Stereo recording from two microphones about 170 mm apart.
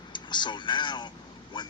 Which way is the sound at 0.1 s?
25° left (ahead or behind).